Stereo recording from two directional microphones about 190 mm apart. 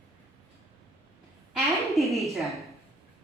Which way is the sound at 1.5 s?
Centre (ahead or behind).